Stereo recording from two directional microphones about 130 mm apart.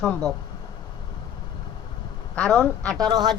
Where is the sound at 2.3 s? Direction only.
5° left (ahead or behind).